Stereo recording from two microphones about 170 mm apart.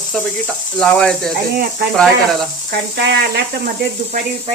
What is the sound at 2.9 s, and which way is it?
Speech, 70° right (ahead or behind).